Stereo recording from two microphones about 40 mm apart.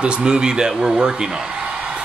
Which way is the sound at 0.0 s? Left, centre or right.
Right.